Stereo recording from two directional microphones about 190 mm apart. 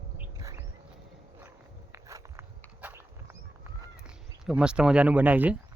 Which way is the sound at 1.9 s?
15° right (ahead or behind).